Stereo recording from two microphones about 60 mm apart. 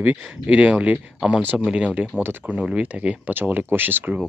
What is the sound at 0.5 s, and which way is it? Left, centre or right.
Speech, right.